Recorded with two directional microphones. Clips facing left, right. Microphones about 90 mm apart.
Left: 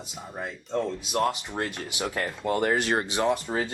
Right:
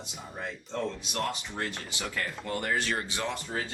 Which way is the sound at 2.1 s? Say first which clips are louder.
Left 6 dB; 40° left (ahead or behind).